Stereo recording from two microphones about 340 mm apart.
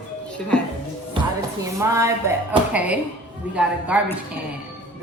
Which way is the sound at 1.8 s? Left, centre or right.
Centre.